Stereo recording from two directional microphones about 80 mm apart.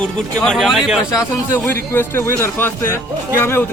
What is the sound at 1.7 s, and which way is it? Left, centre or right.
A man's voice, left.